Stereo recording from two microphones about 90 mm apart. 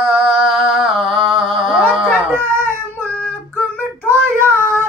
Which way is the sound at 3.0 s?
15° left (ahead or behind).